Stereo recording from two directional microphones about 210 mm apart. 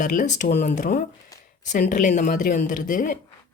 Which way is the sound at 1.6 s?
35° left (ahead or behind).